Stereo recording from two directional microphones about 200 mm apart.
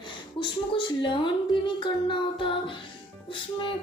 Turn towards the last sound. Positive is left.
turn(degrees=25)  # may be behind; listen again after turning